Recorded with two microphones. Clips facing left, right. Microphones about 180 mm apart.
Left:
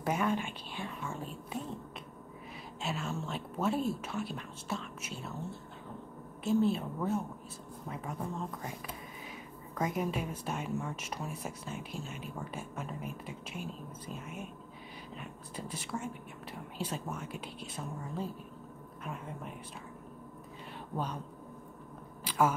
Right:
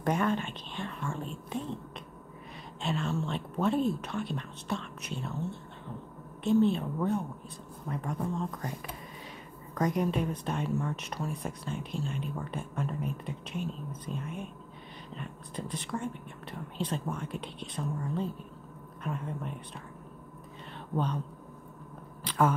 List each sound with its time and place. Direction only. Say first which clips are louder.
0.0 s speech: right 3 dB; 5° left (ahead or behind)
2.8 s a woman's voice: right 5 dB; 5° left (ahead or behind)
6.4 s a woman's voice: right 4 dB; 5° left (ahead or behind)
9.8 s speech: right 5 dB; 5° left (ahead or behind)
20.9 s speech: right 5 dB; 10° left (ahead or behind)
22.2 s a sound: right 2 dB; 10° left (ahead or behind)